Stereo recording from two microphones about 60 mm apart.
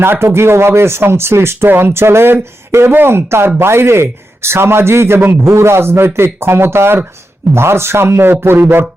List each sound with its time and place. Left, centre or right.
0.0 s speech: right